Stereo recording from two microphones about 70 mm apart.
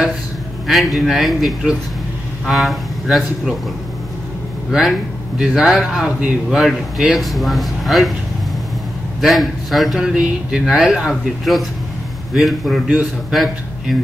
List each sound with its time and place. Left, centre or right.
0.7 s speech: centre
4.6 s a man's voice: centre
9.2 s a man's voice: centre